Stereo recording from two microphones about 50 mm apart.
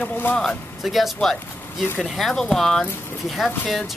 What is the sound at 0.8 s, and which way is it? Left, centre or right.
Speech, centre.